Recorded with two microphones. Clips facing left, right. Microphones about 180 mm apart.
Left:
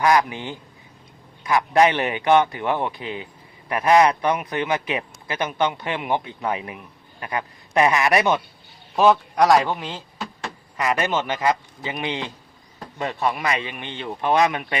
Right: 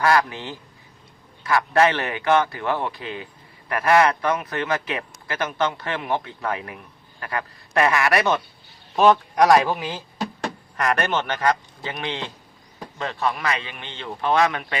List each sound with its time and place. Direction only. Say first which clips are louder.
0.0 s a man's voice: left 1 dB; 15° left (ahead or behind)
9.0 s a man's voice: even; centre (ahead or behind)
10.8 s speech: even; 5° left (ahead or behind)